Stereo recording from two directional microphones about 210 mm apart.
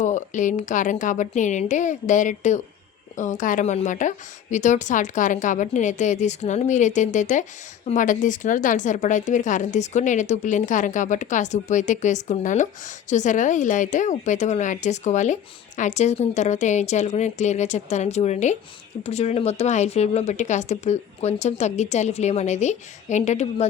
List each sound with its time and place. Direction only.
0.0 s speech: 35° left (ahead or behind)